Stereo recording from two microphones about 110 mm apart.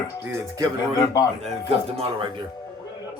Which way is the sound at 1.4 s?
65° right (ahead or behind).